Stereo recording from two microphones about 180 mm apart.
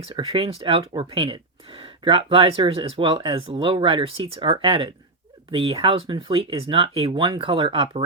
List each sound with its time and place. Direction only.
0.0 s speech: 30° right (ahead or behind)